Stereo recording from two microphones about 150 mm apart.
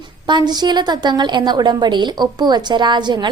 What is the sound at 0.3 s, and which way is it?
A woman's voice, 30° right (ahead or behind).